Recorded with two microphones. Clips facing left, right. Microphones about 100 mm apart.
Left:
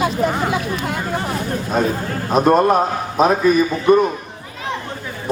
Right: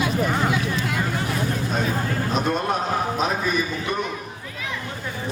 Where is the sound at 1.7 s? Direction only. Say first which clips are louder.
Left 8 dB; 45° left (ahead or behind).